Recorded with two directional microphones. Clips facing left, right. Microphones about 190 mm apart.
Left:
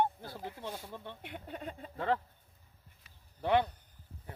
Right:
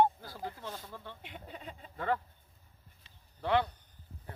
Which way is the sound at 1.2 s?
50° left (ahead or behind).